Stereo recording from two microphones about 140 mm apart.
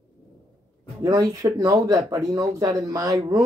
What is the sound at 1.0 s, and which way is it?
Speech, 30° right (ahead or behind).